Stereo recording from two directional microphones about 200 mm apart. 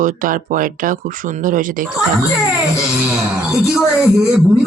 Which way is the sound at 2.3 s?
Centre (ahead or behind).